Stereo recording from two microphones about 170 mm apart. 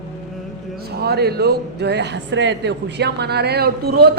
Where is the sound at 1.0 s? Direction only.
70° right (ahead or behind).